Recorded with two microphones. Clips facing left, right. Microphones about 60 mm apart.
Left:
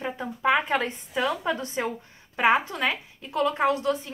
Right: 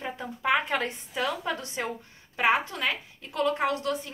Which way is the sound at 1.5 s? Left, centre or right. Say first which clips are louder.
Left 4 dB; left.